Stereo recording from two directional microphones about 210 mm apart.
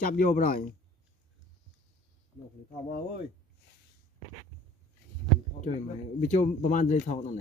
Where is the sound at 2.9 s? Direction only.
45° left (ahead or behind).